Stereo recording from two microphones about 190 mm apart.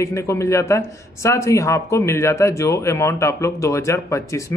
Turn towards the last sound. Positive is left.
turn(degrees=15)  # may be behind; listen again after turning